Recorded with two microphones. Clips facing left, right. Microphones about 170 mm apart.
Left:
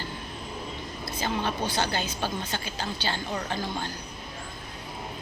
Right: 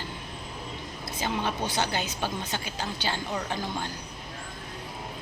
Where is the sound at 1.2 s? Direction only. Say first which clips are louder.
Left 1 dB; 15° right (ahead or behind).